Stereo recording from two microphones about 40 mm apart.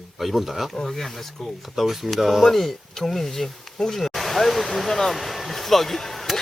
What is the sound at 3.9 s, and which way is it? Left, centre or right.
Speech, centre.